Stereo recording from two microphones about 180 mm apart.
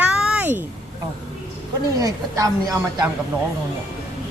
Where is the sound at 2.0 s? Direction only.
20° right (ahead or behind).